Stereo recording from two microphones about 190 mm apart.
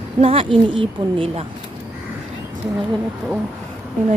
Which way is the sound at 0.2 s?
30° right (ahead or behind).